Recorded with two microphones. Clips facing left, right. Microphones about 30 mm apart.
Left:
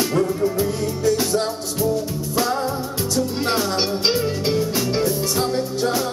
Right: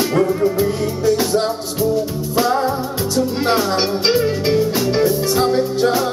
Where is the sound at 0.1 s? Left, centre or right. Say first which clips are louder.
Right 4 dB; right.